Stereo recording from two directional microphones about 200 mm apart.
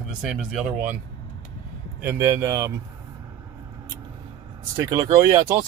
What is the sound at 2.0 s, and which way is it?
Speech, 10° right (ahead or behind).